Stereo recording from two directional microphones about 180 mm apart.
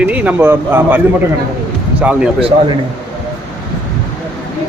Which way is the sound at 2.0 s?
5° right (ahead or behind).